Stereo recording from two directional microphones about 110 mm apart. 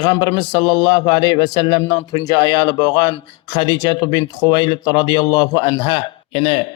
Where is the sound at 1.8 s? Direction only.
30° left (ahead or behind).